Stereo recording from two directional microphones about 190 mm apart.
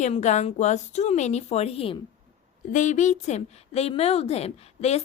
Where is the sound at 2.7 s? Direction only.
40° left (ahead or behind).